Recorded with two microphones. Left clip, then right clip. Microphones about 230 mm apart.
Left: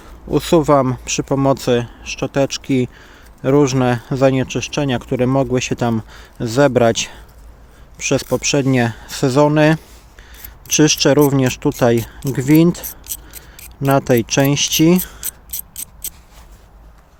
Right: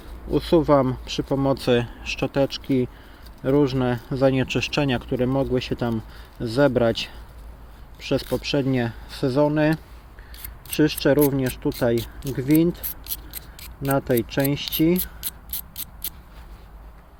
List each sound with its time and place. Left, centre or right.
0.3 s speech: left
4.4 s speech: centre; by 15.0 s left
15.5 s a sound: centre